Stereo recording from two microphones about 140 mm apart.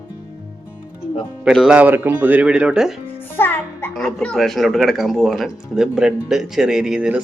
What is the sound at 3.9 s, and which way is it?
Speech, 5° left (ahead or behind).